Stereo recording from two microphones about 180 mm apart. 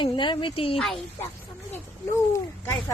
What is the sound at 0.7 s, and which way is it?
Speech, centre (ahead or behind).